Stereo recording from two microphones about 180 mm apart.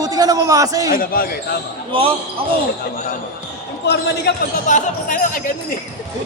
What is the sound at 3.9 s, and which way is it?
Speech, 65° left (ahead or behind).